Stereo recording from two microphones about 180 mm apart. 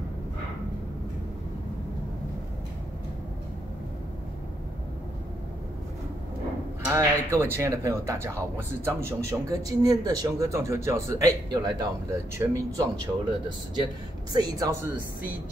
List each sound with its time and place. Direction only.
6.8 s speech: 15° right (ahead or behind)
14.3 s speech: 20° right (ahead or behind)